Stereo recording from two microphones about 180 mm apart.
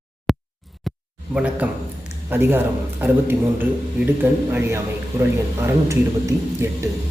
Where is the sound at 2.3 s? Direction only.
10° right (ahead or behind).